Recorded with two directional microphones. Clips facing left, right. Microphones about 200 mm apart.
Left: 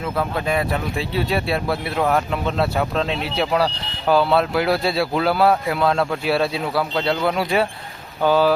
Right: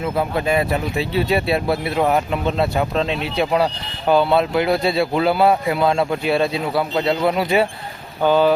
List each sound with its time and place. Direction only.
0.4 s speech: 5° right (ahead or behind)
1.6 s speech: 25° right (ahead or behind)
2.0 s speech: 10° right (ahead or behind)